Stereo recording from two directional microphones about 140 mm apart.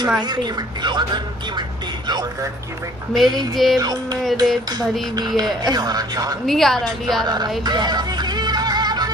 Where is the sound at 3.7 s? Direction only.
30° right (ahead or behind).